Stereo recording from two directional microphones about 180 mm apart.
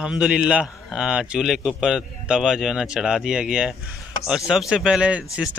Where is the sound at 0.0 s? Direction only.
5° right (ahead or behind).